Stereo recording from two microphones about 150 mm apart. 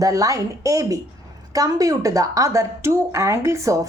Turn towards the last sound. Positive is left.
turn(degrees=-20)  # may be behind; listen again after turning